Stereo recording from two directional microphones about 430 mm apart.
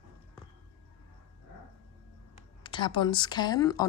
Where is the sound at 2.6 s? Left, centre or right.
Centre.